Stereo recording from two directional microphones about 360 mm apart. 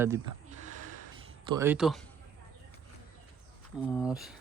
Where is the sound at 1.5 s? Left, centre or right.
Centre.